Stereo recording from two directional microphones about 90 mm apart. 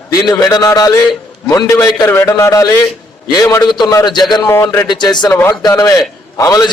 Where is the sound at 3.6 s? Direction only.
50° left (ahead or behind).